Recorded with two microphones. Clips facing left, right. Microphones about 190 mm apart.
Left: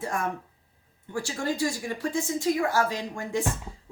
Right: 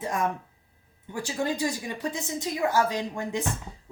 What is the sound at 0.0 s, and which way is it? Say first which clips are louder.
Speech: right 2 dB; 20° right (ahead or behind).